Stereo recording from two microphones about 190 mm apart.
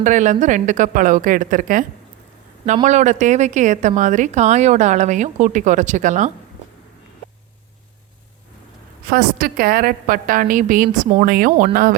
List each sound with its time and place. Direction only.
0.0 s a woman's voice: 40° right (ahead or behind)
2.8 s speech: 40° right (ahead or behind)
9.0 s a woman's voice: 50° right (ahead or behind)